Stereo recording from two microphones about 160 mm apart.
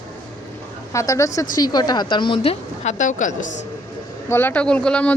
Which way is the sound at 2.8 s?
50° left (ahead or behind).